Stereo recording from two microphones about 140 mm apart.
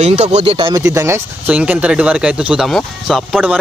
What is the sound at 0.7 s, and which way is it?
Speech, 20° right (ahead or behind).